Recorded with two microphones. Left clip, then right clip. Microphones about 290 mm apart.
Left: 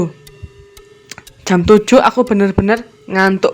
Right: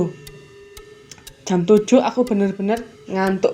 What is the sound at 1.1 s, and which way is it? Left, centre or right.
Speech, left.